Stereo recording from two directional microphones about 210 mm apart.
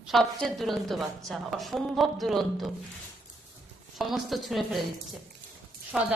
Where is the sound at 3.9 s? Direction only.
Centre (ahead or behind).